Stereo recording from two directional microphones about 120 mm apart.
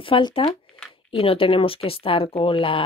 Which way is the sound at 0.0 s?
45° left (ahead or behind).